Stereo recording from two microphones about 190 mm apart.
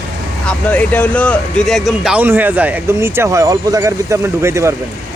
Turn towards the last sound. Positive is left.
turn(degrees=-15)  # may be behind; listen again after turning